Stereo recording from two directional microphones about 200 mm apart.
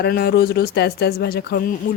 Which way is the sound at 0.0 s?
50° left (ahead or behind).